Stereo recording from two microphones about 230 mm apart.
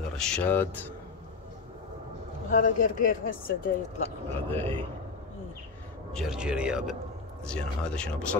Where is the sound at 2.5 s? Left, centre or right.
Left.